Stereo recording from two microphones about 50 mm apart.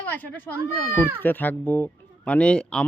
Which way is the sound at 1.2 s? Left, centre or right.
Left.